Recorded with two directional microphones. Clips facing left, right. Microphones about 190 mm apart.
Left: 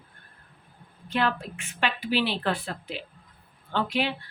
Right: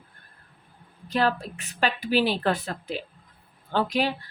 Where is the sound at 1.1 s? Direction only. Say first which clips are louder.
Right 2 dB; 40° right (ahead or behind).